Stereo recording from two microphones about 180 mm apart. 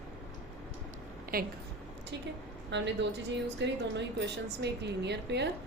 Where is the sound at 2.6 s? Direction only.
80° right.